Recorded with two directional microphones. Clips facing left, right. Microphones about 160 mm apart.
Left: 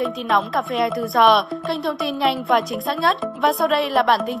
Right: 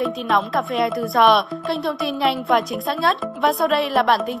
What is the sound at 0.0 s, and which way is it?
Speech, centre (ahead or behind).